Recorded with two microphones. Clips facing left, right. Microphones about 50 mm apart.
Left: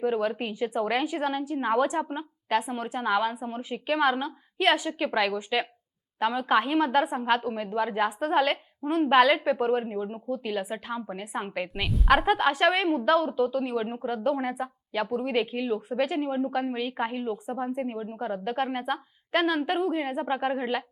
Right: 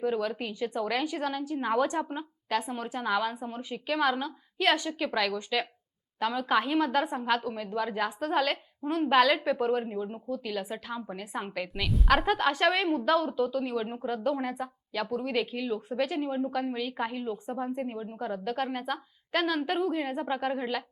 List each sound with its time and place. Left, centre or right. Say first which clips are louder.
0.0 s a woman's voice: left 3 dB; centre
11.7 s a woman's voice: left 3 dB; centre
17.3 s a woman's voice: left 2 dB; centre